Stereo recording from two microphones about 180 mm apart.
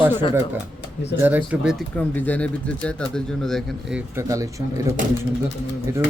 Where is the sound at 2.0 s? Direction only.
10° left (ahead or behind).